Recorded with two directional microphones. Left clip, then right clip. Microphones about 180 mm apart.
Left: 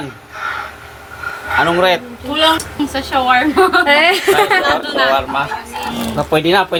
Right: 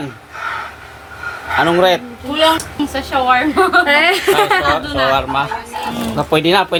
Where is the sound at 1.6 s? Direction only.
35° right (ahead or behind).